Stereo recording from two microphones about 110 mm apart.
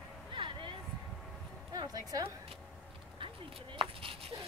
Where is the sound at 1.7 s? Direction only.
40° right (ahead or behind).